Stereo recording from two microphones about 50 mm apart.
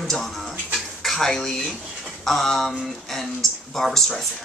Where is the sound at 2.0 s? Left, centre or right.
Centre.